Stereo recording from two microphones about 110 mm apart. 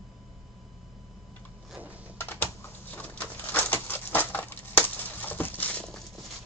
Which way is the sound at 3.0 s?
15° left (ahead or behind).